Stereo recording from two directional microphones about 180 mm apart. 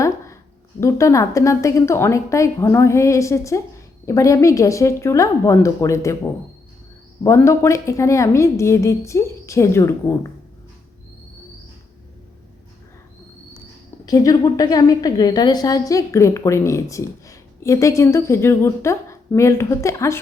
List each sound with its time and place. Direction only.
0.8 s a woman's voice: 15° left (ahead or behind)
7.3 s a woman's voice: 15° left (ahead or behind)
14.0 s a woman's voice: 20° left (ahead or behind)